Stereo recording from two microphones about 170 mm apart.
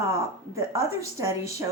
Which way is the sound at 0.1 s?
15° right (ahead or behind).